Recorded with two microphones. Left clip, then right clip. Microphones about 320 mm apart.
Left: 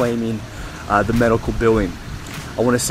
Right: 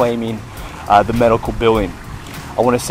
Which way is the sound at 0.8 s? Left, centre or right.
Centre.